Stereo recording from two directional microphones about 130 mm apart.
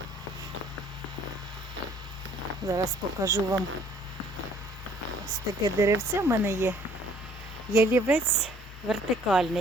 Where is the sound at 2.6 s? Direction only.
25° right (ahead or behind).